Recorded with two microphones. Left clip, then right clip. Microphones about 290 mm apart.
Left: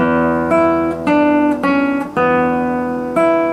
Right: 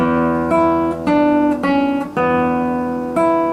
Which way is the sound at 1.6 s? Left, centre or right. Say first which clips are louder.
Left 1 dB; centre.